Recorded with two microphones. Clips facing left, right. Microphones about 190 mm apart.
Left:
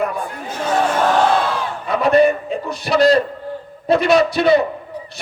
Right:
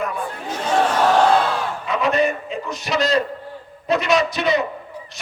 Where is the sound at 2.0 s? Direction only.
35° left (ahead or behind).